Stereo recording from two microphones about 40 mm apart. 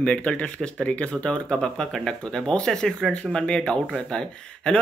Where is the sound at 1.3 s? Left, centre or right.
Centre.